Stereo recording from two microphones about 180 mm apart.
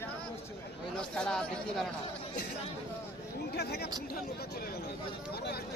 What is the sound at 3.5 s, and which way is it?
Speech, 65° left (ahead or behind).